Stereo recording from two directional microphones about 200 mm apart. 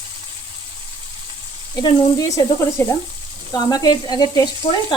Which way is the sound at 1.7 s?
20° left (ahead or behind).